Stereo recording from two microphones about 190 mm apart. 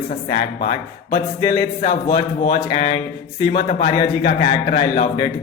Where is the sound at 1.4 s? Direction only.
20° left (ahead or behind).